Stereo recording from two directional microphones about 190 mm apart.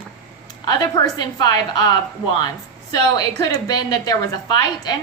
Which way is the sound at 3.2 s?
20° left (ahead or behind).